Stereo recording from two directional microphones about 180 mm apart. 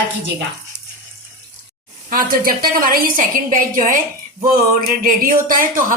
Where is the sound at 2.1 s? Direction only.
55° right (ahead or behind).